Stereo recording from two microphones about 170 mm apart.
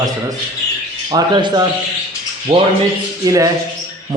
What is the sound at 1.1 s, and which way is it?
Speech, 25° right (ahead or behind).